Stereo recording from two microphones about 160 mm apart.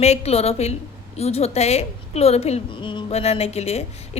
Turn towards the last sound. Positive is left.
turn(degrees=40)  # may be behind; listen again after turning